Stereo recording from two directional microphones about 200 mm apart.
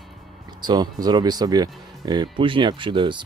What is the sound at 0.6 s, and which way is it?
Speech, 20° right (ahead or behind).